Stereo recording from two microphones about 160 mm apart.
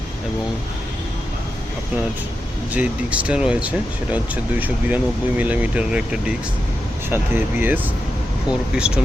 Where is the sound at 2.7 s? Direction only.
10° right (ahead or behind).